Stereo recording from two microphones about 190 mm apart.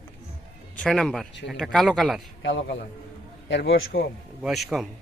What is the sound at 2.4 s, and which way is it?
A man's voice, 75° left (ahead or behind).